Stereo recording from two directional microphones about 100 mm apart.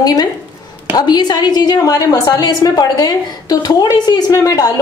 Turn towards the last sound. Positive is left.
turn(degrees=35)  # may be behind; listen again after turning